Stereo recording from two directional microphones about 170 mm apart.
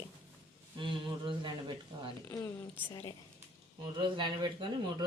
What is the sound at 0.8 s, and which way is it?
Speech, 30° right (ahead or behind).